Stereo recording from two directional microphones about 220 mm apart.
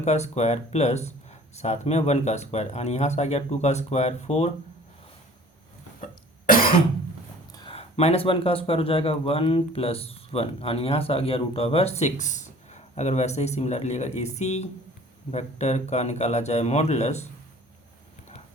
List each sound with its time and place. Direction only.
0.0 s speech: 30° left (ahead or behind)
6.4 s cough: 40° left (ahead or behind)
7.5 s speech: 20° left (ahead or behind)